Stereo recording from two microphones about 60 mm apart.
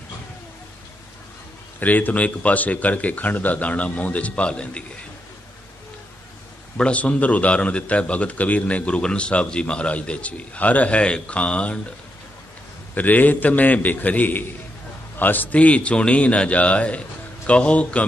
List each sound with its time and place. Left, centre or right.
1.8 s a man's voice: left
6.8 s a man's voice: left
12.9 s a man's voice: left
15.5 s a man's voice: left